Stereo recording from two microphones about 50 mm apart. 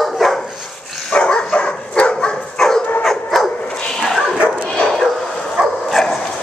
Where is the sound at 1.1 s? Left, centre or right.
Centre.